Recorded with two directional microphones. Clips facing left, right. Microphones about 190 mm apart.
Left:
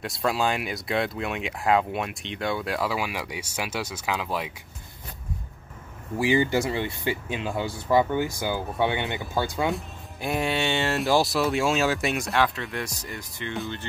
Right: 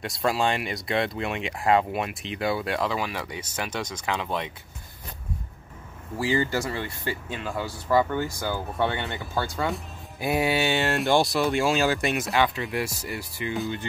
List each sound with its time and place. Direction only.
0.0 s speech: centre (ahead or behind)
6.1 s speech: 15° left (ahead or behind)
9.7 s speech: centre (ahead or behind)